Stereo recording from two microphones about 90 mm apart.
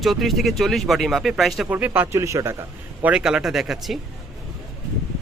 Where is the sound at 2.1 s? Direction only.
35° right (ahead or behind).